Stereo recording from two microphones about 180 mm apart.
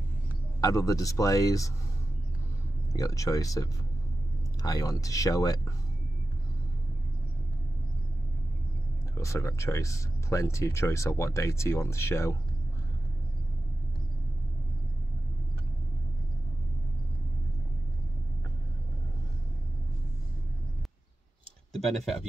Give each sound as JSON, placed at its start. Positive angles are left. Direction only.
{"t": 0.6, "sound": "speech", "side_deg": 20}
{"t": 2.9, "sound": "speech", "side_deg": 20}
{"t": 9.1, "sound": "speech", "side_deg": 15}